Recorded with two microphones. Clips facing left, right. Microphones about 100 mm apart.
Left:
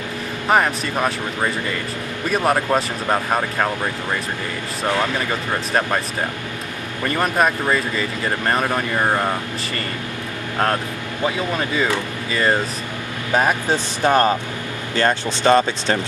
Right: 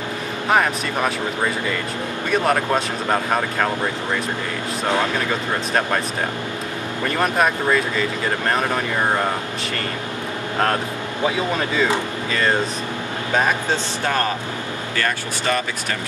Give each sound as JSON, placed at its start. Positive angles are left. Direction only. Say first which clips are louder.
{"t": 0.5, "sound": "speech", "louder": "left 1 dB", "side_deg": 0}
{"t": 2.4, "sound": "speech", "louder": "left 3 dB", "side_deg": 5}
{"t": 7.2, "sound": "speech", "louder": "left 1 dB", "side_deg": 0}
{"t": 13.7, "sound": "speech", "louder": "left 4 dB", "side_deg": 20}